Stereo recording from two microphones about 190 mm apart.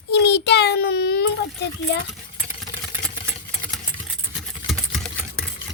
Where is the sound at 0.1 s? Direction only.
65° left (ahead or behind).